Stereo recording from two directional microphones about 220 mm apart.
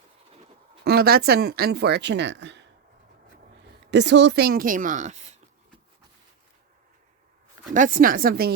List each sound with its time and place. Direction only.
0.9 s speech: 45° right (ahead or behind)
3.9 s a woman's voice: 55° right (ahead or behind); by 5.4 s 30° right (ahead or behind)
7.7 s a woman's voice: 40° right (ahead or behind)